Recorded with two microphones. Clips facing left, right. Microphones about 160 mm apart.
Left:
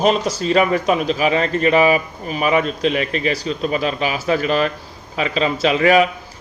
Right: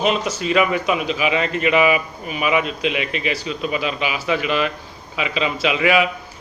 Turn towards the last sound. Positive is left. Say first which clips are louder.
# left 4 dB
turn(degrees=40)  # may be behind; listen again after turning